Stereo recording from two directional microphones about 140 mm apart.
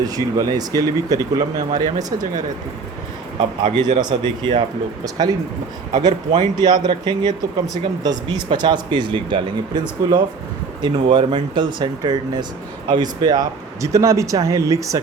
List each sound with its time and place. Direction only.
0.0 s speech: 25° right (ahead or behind)
3.6 s speech: 35° right (ahead or behind)